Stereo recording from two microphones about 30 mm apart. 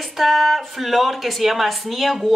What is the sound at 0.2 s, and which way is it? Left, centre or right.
A woman's voice, centre.